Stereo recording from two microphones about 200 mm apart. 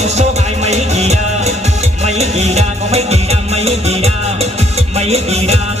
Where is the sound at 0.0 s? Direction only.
35° right (ahead or behind).